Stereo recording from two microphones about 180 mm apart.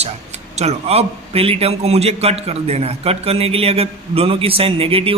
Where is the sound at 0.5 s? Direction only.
35° right (ahead or behind).